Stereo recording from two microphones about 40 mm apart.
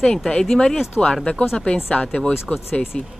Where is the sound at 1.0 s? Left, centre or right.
Centre.